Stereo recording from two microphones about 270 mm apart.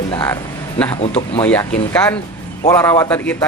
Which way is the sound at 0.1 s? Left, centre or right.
Centre.